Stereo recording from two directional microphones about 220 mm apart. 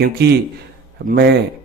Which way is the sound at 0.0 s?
50° right (ahead or behind).